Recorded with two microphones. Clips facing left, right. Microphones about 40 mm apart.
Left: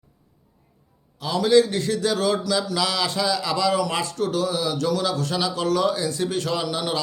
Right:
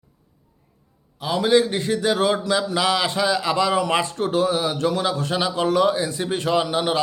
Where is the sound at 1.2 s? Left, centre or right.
Right.